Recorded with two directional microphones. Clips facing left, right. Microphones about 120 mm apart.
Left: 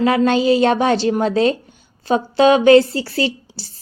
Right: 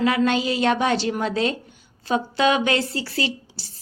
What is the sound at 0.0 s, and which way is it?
A woman's voice, 35° left (ahead or behind).